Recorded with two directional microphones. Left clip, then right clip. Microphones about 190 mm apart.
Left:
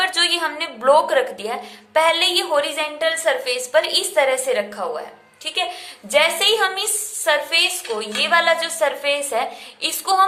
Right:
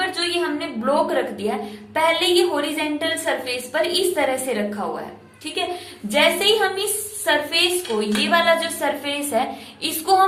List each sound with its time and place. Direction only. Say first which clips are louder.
0.0 s a woman's voice: left 4 dB; 45° left (ahead or behind)
6.1 s a woman's voice: left 1 dB; 35° left (ahead or behind)